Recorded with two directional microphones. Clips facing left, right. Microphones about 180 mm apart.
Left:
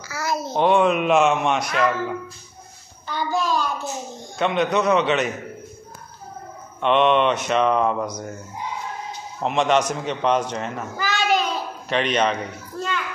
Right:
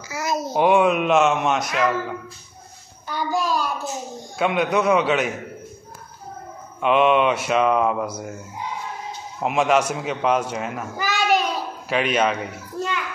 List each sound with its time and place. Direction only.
0.1 s a sound: 20° right (ahead or behind)
0.5 s a child's voice: 10° right (ahead or behind)
6.8 s speech: 5° right (ahead or behind)